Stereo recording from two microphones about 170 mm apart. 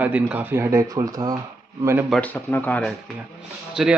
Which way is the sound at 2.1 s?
10° left (ahead or behind).